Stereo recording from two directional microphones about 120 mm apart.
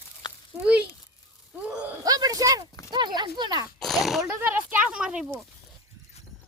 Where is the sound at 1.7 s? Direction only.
10° right (ahead or behind).